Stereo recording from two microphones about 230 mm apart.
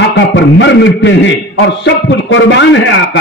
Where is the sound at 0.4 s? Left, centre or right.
Left.